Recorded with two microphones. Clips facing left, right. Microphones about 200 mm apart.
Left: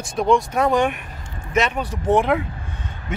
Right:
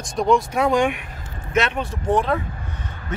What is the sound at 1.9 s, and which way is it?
Speech, 15° left (ahead or behind).